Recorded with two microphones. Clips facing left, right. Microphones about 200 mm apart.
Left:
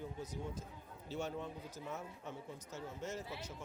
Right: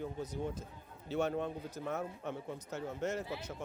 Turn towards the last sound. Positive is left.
turn(degrees=-60)  # may be behind; listen again after turning